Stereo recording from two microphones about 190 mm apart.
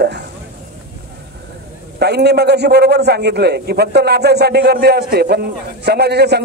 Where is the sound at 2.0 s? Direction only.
60° right (ahead or behind).